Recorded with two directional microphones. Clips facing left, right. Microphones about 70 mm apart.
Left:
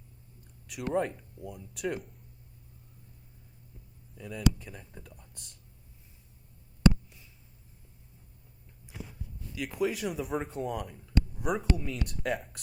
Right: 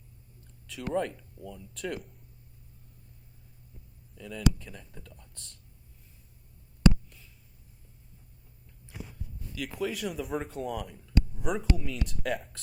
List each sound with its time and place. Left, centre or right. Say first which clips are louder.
0.7 s speech: left 1 dB; centre
4.1 s speech: even; centre
9.6 s speech: left 2 dB; centre